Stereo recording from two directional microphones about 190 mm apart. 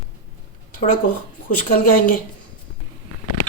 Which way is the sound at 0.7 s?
45° left (ahead or behind).